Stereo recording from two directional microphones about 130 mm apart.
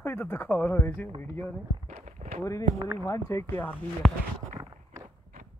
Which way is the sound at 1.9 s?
65° right (ahead or behind).